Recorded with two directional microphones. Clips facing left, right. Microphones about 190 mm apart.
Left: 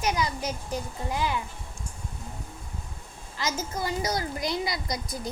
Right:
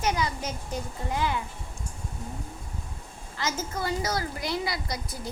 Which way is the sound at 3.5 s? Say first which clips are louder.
Even; 10° left (ahead or behind).